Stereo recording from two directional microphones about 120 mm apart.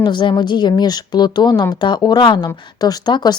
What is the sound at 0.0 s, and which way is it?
Speech, 40° left (ahead or behind).